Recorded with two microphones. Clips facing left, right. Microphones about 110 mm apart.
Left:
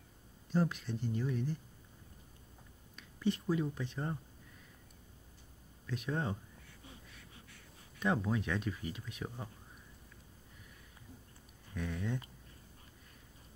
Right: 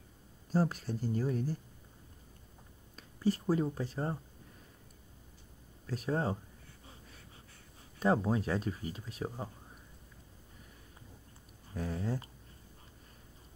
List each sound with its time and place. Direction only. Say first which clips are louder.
0.5 s speech: right 2 dB; 40° right (ahead or behind)
3.0 s speech: right 3 dB; 40° right (ahead or behind)
5.9 s speech: right 4 dB; 35° right (ahead or behind)
6.9 s a sound: right 1 dB; 35° right (ahead or behind)
8.0 s speech: right 4 dB; 35° right (ahead or behind)
11.7 s speech: right 2 dB; 35° right (ahead or behind)